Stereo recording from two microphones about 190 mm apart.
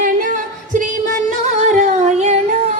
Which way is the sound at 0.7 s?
40° right (ahead or behind).